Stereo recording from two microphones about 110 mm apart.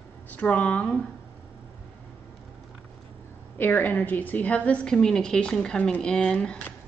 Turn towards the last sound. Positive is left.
turn(degrees=10)  # may be behind; listen again after turning